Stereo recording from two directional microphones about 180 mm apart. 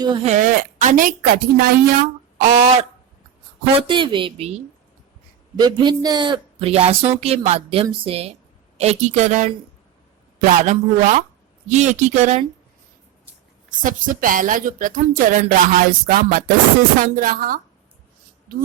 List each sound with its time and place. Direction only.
0.0 s a woman's voice: 25° right (ahead or behind)
0.3 s speech: 45° right (ahead or behind)
2.4 s speech: 35° right (ahead or behind)
3.8 s a woman's voice: 25° right (ahead or behind)
10.7 s speech: 45° right (ahead or behind)
13.8 s speech: 50° right (ahead or behind)